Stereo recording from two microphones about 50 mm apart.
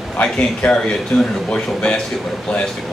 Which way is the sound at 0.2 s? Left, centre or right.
Left.